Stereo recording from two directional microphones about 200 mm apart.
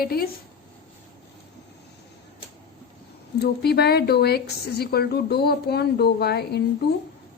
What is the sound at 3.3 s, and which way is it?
A woman's voice, 55° left (ahead or behind).